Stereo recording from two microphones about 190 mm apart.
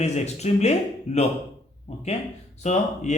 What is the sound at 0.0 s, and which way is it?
Speech, 35° left (ahead or behind).